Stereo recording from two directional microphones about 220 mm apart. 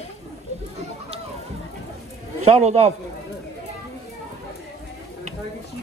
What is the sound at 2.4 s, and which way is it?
Speech, 30° right (ahead or behind).